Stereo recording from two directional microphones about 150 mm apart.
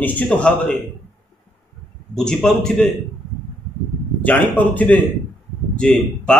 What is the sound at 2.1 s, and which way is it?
Speech, 5° left (ahead or behind).